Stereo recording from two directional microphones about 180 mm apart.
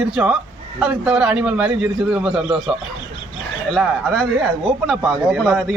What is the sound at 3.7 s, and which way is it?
A man's voice, centre (ahead or behind).